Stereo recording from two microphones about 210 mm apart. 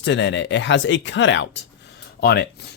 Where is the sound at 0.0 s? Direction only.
60° left (ahead or behind).